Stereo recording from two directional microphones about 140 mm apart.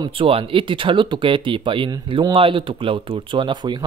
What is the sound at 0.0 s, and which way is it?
Speech, 40° right (ahead or behind).